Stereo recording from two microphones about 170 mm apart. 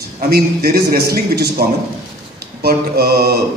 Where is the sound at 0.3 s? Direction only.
65° right (ahead or behind).